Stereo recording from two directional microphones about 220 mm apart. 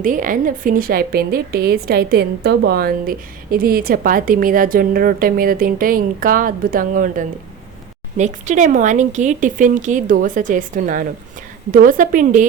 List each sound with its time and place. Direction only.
0.0 s a woman's voice: 35° right (ahead or behind)